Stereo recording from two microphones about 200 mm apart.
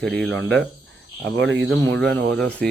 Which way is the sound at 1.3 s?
65° right (ahead or behind).